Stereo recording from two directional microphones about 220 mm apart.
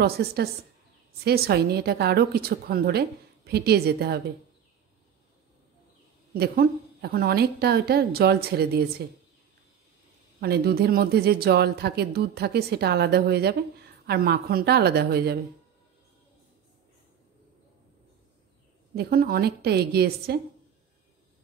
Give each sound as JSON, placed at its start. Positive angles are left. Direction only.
{"t": 0.0, "sound": "speech", "side_deg": -45}
{"t": 6.3, "sound": "speech", "side_deg": -45}
{"t": 10.4, "sound": "speech", "side_deg": -45}
{"t": 18.9, "sound": "speech", "side_deg": -45}